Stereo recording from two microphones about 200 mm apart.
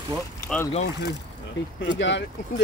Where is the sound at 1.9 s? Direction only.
60° left (ahead or behind).